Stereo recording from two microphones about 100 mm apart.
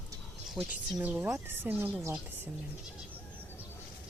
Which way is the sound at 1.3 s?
20° right (ahead or behind).